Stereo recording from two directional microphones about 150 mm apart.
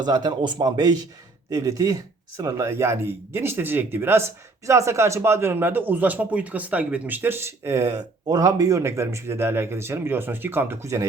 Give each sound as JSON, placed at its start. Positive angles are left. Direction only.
{"t": 0.0, "sound": "a man's voice", "side_deg": -30}